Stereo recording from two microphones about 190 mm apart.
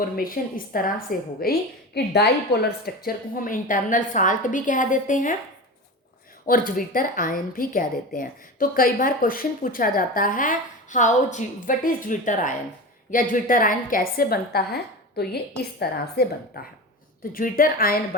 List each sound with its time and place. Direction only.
0.0 s a woman's voice: 50° left (ahead or behind)
6.4 s a woman's voice: 45° left (ahead or behind)